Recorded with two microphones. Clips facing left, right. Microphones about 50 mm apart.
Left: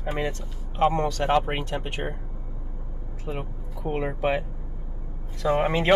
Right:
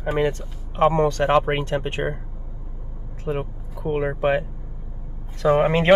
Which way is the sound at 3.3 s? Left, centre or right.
Right.